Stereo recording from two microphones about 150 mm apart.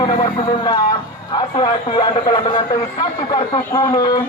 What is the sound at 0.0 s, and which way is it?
Music, 30° left (ahead or behind).